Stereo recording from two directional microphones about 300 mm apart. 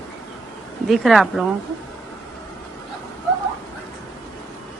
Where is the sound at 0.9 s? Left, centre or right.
Centre.